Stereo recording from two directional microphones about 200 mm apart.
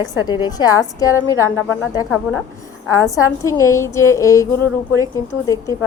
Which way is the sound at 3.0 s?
15° left (ahead or behind).